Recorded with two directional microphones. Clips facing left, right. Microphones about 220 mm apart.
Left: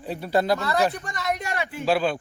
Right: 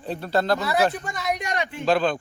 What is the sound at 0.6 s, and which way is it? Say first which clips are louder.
Speech: right 1 dB; 10° right (ahead or behind).